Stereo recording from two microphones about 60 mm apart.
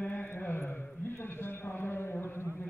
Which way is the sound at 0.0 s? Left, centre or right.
Left.